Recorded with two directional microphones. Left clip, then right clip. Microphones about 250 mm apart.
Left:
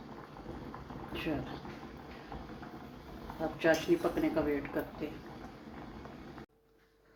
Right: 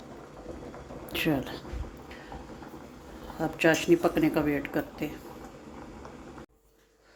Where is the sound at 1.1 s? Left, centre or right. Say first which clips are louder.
Right 9 dB; right.